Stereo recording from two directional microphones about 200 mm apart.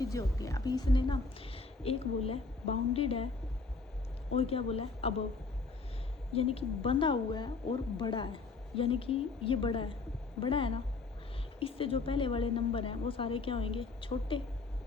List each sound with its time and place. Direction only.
0.0 s a woman's voice: 15° left (ahead or behind)
4.3 s a woman's voice: 30° left (ahead or behind)
6.3 s a woman's voice: 30° left (ahead or behind)